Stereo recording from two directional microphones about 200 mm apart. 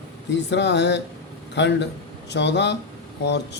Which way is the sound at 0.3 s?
60° left (ahead or behind).